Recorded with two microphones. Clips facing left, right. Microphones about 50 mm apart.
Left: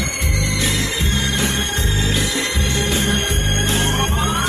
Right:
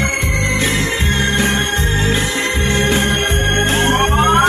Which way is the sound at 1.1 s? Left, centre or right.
Right.